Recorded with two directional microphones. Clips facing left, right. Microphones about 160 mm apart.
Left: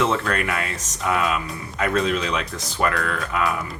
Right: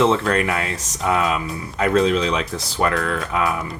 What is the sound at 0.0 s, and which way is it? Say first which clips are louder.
Speech: right 4 dB; 30° right (ahead or behind).